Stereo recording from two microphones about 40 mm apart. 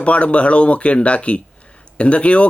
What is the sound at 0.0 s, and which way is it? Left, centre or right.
Speech, left.